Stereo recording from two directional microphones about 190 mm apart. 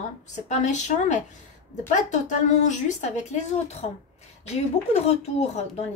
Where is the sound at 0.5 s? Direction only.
40° left (ahead or behind).